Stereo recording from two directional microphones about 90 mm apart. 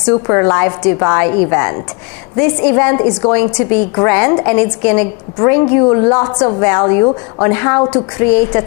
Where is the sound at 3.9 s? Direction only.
25° left (ahead or behind).